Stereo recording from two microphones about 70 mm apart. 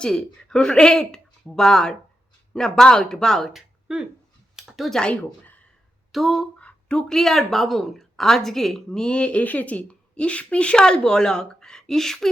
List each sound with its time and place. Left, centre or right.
0.0 s speech: centre
6.6 s speech: centre